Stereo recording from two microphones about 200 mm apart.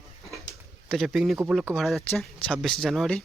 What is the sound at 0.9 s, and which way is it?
Speech, centre (ahead or behind).